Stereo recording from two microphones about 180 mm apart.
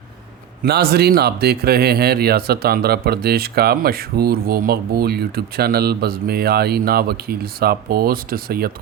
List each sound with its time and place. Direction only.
0.6 s speech: 60° right (ahead or behind)